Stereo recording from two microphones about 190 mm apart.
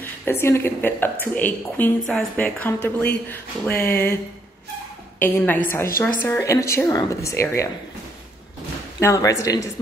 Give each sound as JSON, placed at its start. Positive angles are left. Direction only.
{"t": 0.2, "sound": "a woman's voice", "side_deg": 10}
{"t": 5.2, "sound": "a woman's voice", "side_deg": 10}
{"t": 9.0, "sound": "a woman's voice", "side_deg": 15}